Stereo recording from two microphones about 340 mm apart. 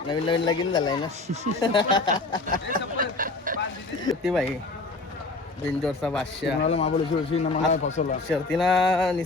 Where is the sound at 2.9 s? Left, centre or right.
Right.